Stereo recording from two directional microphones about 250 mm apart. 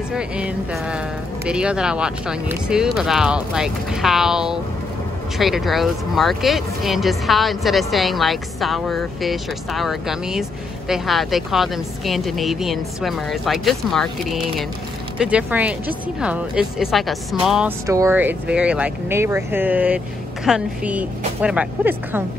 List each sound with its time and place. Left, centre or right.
0.1 s speech: centre